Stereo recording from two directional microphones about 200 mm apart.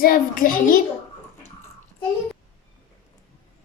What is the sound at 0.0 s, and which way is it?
Speech, 45° left (ahead or behind).